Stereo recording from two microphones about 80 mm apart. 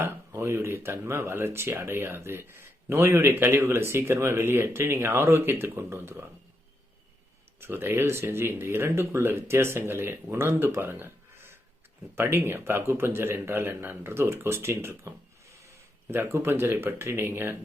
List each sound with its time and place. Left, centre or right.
0.0 s speech: right
7.6 s speech: right
10.9 s a sound: right
12.1 s speech: right
16.1 s speech: right